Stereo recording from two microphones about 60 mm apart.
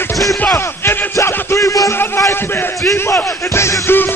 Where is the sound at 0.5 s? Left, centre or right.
Left.